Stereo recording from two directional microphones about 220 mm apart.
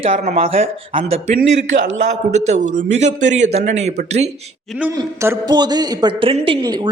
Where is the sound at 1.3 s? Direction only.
40° right (ahead or behind).